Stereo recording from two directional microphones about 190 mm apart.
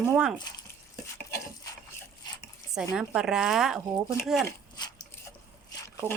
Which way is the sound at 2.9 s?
5° right (ahead or behind).